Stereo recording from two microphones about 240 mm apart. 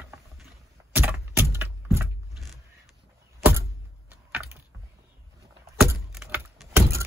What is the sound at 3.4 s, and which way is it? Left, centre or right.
Computer keyboard, centre.